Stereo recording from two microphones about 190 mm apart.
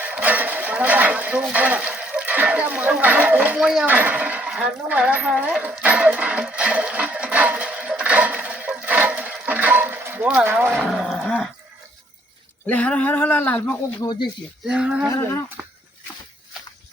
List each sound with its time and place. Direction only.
0.0 s a sound: 10° right (ahead or behind)
12.6 s speech: 5° left (ahead or behind)
14.0 s speech: 20° left (ahead or behind)
14.7 s speech: 5° right (ahead or behind)
15.1 s speech: 15° left (ahead or behind)